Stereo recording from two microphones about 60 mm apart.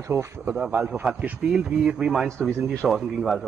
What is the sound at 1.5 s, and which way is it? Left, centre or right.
A man's voice, centre.